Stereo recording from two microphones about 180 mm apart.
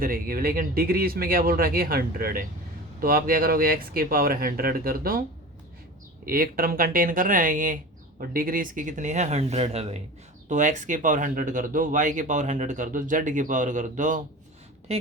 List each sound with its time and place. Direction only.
0.0 s speech: 55° right (ahead or behind)
6.2 s speech: 55° right (ahead or behind)